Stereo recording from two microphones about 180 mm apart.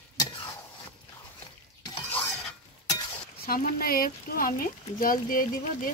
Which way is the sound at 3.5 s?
55° left (ahead or behind).